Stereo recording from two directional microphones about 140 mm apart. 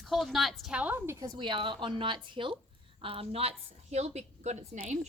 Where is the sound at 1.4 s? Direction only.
35° right (ahead or behind).